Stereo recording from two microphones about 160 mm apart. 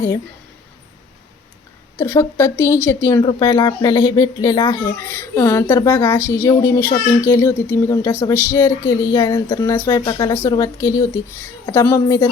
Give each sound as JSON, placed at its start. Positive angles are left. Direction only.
{"t": 2.0, "sound": "speech", "side_deg": 15}